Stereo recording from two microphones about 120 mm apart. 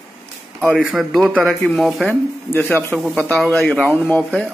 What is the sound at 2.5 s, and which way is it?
Speech, 15° left (ahead or behind).